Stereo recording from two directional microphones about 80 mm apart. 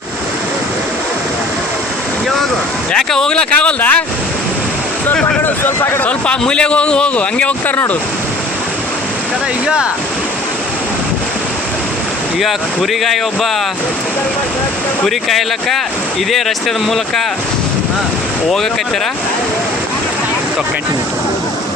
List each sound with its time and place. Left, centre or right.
2.9 s a man's voice: centre
5.6 s speech: left
6.2 s a man's voice: centre
12.4 s speech: centre
15.0 s speech: centre